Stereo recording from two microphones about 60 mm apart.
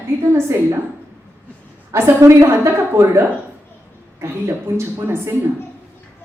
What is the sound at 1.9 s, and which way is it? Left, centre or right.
A woman's voice, right.